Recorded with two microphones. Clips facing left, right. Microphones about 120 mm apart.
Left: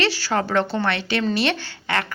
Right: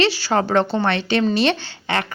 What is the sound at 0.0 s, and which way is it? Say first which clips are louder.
A woman's voice: right 4 dB; 20° right (ahead or behind).